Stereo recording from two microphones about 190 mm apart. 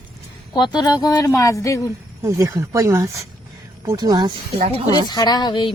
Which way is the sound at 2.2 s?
15° right (ahead or behind).